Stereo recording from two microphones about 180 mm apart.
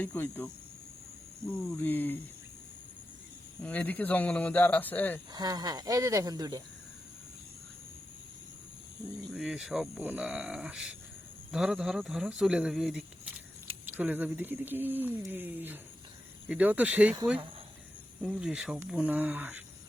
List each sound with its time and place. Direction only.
0.0 s speech: 10° left (ahead or behind)
1.6 s speech: 15° left (ahead or behind)
3.6 s speech: 10° left (ahead or behind)
5.3 s speech: 20° right (ahead or behind)
9.3 s speech: centre (ahead or behind)
18.2 s speech: centre (ahead or behind)